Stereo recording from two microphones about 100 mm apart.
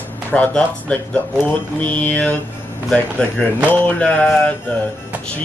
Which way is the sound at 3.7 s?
15° left (ahead or behind).